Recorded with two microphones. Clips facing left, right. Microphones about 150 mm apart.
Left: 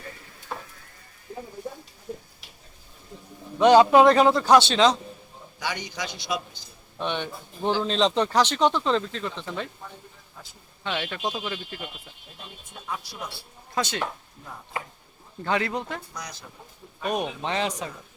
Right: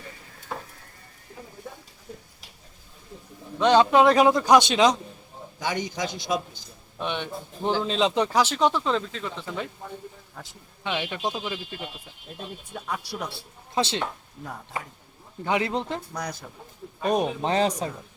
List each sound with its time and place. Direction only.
3.6 s a man's voice: 10° left (ahead or behind)
4.0 s speech: 10° right (ahead or behind)
5.6 s a man's voice: 45° right (ahead or behind)
7.0 s speech: centre (ahead or behind)
10.8 s speech: 15° right (ahead or behind)
12.9 s speech: 70° right (ahead or behind)
13.7 s speech: 25° right (ahead or behind)
15.4 s speech: 20° right (ahead or behind)
16.1 s a man's voice: 55° right (ahead or behind)
17.0 s a man's voice: 35° right (ahead or behind)